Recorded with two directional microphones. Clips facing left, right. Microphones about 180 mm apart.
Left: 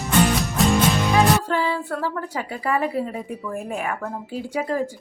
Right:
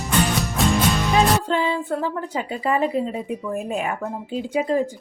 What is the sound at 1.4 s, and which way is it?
A woman's voice, 20° right (ahead or behind).